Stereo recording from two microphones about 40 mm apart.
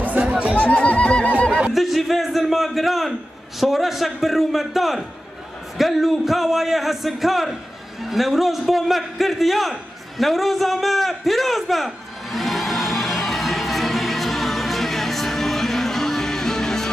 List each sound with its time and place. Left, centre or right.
0.0 s chatter: right
0.8 s neigh: left
1.7 s a man's voice: centre
8.0 s a sound: centre